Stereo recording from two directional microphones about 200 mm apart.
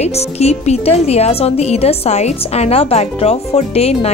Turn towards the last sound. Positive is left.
turn(degrees=30)  # may be behind; listen again after turning